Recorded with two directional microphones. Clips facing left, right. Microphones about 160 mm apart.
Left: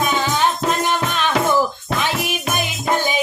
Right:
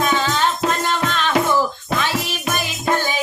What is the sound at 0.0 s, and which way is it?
Music, 15° left (ahead or behind).